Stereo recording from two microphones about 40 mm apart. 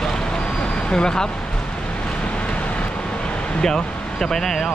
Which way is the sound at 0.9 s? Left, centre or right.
Centre.